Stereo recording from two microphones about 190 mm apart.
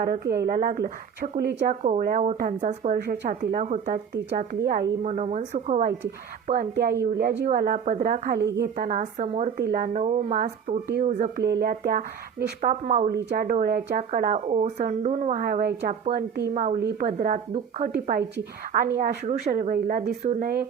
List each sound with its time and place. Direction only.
0.0 s a woman's voice: 55° right (ahead or behind)
1.8 s a woman's voice: 45° right (ahead or behind)
6.5 s a woman's voice: 50° right (ahead or behind)
9.6 s a woman's voice: 50° right (ahead or behind)
11.3 s a woman's voice: 55° right (ahead or behind); by 17.9 s 35° right (ahead or behind)
18.0 s a woman's voice: 55° right (ahead or behind)